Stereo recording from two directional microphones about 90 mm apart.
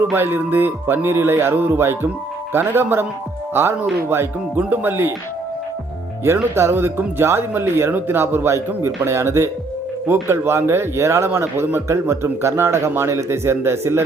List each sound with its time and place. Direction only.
0.0 s a man's voice: 25° right (ahead or behind)
6.2 s a man's voice: 30° right (ahead or behind)